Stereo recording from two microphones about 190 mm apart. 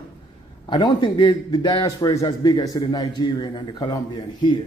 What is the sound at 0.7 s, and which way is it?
A man's voice, 20° left (ahead or behind).